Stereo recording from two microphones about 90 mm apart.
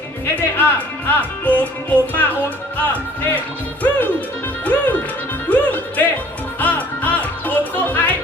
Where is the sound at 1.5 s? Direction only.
20° left (ahead or behind).